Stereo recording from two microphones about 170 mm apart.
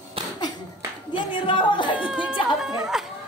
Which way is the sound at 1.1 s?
30° left (ahead or behind).